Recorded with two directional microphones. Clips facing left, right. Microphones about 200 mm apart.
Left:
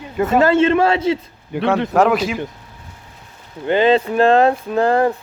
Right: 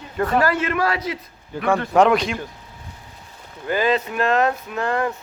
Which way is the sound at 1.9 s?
5° left (ahead or behind).